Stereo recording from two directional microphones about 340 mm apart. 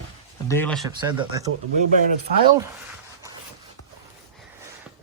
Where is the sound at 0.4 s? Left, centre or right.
Centre.